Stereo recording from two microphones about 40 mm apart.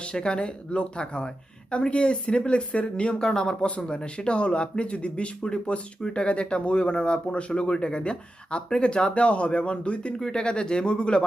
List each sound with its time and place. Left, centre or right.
0.0 s speech: left
3.2 s speech: centre
10.2 s speech: centre